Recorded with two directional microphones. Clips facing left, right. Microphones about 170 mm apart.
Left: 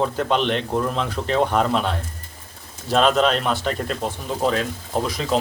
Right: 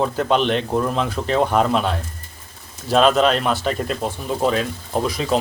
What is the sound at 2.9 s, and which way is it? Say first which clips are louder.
A man's voice: right 2 dB; 5° right (ahead or behind).